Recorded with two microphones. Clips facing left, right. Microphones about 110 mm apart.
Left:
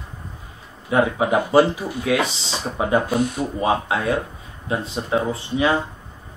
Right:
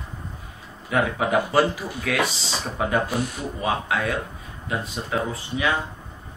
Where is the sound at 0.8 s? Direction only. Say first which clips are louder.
Left 4 dB; 25° left (ahead or behind).